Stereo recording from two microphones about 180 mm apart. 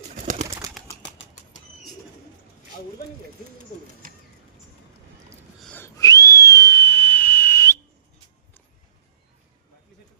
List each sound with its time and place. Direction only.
0.4 s bird: 20° right (ahead or behind)
5.5 s wheeze: 5° left (ahead or behind)
5.8 s whistle: 20° left (ahead or behind)